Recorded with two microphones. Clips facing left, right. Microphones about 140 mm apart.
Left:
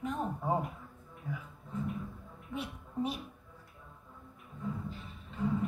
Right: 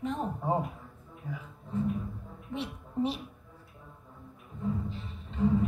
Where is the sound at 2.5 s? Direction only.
30° right (ahead or behind).